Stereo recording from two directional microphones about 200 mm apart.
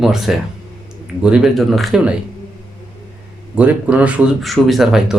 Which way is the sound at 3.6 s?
5° right (ahead or behind).